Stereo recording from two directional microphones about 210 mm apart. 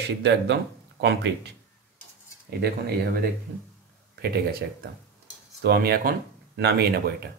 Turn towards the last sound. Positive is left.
turn(degrees=-50)  # may be behind; listen again after turning